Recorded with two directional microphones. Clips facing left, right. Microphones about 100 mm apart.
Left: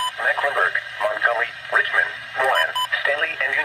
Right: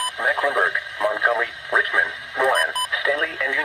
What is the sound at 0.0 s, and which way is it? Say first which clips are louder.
Radio: even; 20° right (ahead or behind).